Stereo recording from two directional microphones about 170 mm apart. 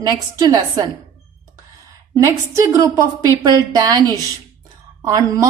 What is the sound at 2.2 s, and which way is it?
A woman's voice, 20° right (ahead or behind).